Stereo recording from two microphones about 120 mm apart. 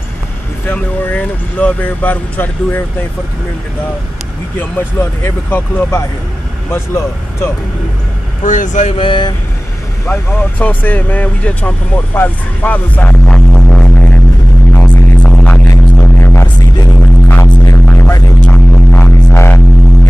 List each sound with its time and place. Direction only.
0.7 s speech: 10° left (ahead or behind)
4.6 s speech: 20° left (ahead or behind)
8.5 s speech: 90° left
8.9 s speech: 45° left (ahead or behind)
10.6 s speech: 15° left (ahead or behind)
14.7 s music: 15° left (ahead or behind)
18.4 s didgeridoo: 15° left (ahead or behind)